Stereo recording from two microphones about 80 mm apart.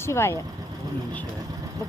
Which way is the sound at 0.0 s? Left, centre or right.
Left.